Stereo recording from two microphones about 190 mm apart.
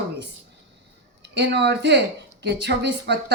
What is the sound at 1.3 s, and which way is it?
A woman's voice, 65° right (ahead or behind).